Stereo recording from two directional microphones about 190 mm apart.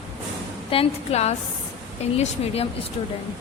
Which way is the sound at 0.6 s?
30° left (ahead or behind).